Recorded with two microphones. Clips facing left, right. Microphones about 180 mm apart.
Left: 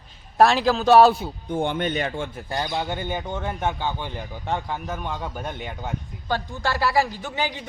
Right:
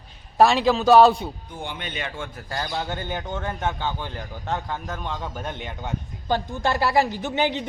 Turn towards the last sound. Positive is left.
turn(degrees=-20)  # may be behind; listen again after turning